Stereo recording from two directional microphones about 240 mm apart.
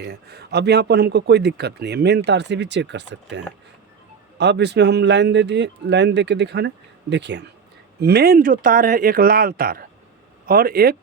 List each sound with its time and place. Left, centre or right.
0.0 s speech: right